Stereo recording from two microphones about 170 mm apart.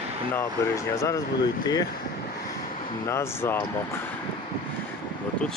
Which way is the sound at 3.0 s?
15° left (ahead or behind).